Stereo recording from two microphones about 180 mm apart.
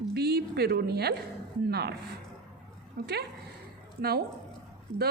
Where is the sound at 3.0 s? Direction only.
65° right (ahead or behind).